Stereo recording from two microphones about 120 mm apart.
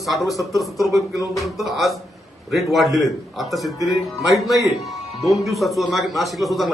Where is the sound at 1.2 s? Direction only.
30° left (ahead or behind).